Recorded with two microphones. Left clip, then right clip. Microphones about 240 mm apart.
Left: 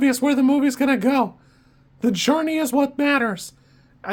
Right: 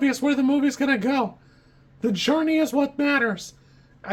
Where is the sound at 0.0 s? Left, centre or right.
Left.